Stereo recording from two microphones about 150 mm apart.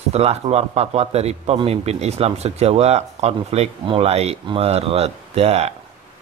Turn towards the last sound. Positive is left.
turn(degrees=-45)  # may be behind; listen again after turning